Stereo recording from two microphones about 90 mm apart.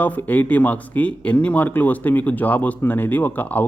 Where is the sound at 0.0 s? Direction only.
20° left (ahead or behind).